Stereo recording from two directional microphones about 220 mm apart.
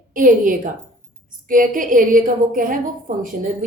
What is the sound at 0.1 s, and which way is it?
A woman's voice, 40° right (ahead or behind).